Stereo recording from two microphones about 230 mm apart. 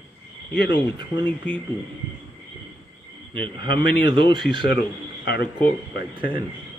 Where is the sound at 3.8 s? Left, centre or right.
Centre.